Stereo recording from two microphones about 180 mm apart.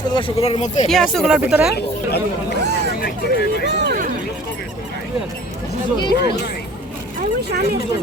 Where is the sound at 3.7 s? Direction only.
70° right (ahead or behind).